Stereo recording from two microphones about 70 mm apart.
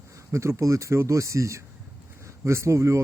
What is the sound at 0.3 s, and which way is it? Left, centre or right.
Speech, right.